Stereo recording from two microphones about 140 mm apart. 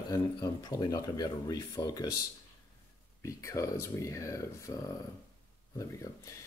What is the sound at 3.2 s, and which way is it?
Speech, 20° left (ahead or behind).